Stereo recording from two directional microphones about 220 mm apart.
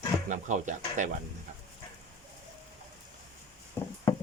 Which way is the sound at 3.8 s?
10° left (ahead or behind).